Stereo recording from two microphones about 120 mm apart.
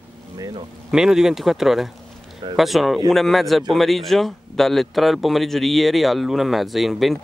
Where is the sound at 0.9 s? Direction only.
5° right (ahead or behind).